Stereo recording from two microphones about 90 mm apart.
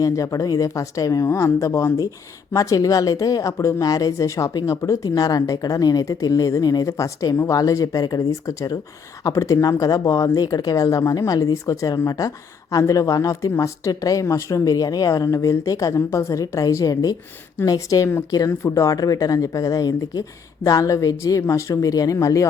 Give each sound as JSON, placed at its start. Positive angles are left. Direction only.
{"t": 0.0, "sound": "speech", "side_deg": 40}
{"t": 5.0, "sound": "a woman's voice", "side_deg": 45}